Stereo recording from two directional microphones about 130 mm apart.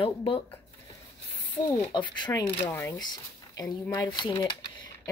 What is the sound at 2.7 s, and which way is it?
Speech, 20° left (ahead or behind).